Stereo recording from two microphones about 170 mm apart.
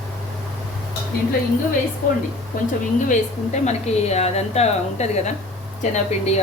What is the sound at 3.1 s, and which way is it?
A woman's voice, 40° left (ahead or behind).